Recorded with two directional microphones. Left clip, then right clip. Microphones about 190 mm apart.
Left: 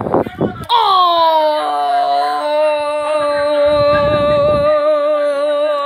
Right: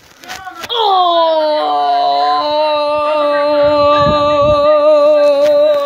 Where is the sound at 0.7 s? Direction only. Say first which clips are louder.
Even; 35° left (ahead or behind).